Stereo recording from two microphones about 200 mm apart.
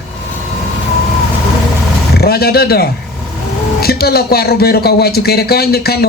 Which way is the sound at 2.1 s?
50° left (ahead or behind).